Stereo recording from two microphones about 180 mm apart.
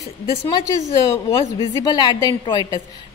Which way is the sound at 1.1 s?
30° left (ahead or behind).